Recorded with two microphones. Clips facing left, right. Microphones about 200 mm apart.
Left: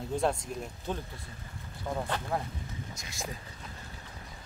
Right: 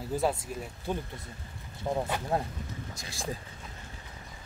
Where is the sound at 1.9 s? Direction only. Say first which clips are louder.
Right 3 dB; 25° right (ahead or behind).